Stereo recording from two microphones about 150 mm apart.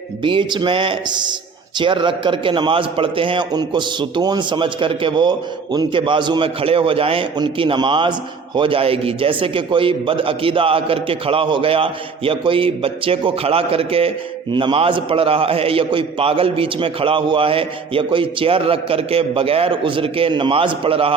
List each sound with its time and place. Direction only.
0.2 s a man's voice: 35° right (ahead or behind)